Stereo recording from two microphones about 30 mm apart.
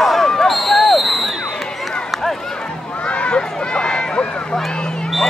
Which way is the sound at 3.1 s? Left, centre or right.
Left.